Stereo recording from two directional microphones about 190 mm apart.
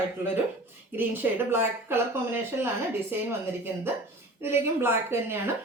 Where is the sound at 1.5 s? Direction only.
10° right (ahead or behind).